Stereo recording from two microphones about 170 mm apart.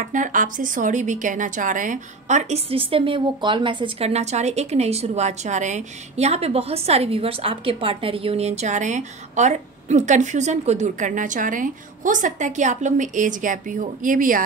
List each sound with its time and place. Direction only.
0.0 s a woman's voice: 50° right (ahead or behind)